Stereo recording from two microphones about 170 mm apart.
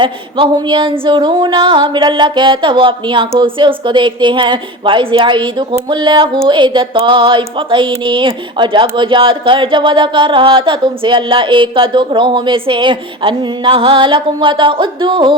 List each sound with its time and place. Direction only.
0.0 s speech: 25° right (ahead or behind)